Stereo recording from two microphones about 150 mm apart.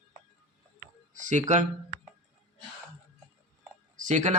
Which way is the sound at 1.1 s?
55° right (ahead or behind).